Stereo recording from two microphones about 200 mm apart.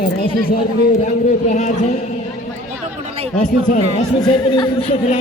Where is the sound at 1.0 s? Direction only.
35° left (ahead or behind).